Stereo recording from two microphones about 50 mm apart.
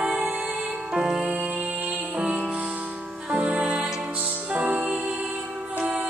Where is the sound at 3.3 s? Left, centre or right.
Right.